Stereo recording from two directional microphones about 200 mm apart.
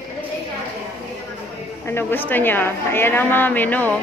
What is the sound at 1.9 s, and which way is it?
A woman's voice, 10° left (ahead or behind).